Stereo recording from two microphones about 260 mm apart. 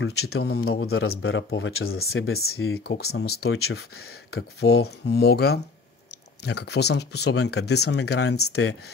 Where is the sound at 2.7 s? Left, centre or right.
Left.